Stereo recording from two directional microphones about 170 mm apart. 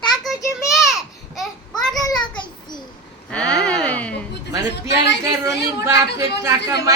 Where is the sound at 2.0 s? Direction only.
25° left (ahead or behind).